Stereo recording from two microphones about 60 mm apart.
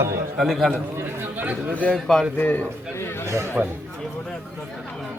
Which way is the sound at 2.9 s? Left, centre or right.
Left.